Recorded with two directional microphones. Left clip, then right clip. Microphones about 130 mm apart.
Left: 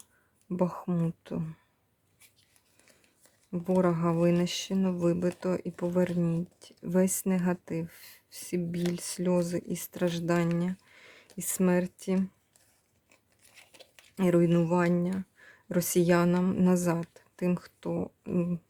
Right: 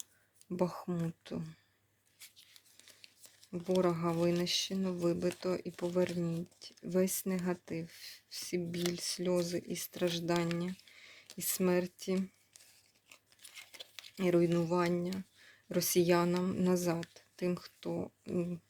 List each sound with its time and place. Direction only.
0.4 s speech: 30° left (ahead or behind)
3.7 s speech: 40° left (ahead or behind)
14.2 s speech: 45° left (ahead or behind)
15.4 s speech: 40° left (ahead or behind)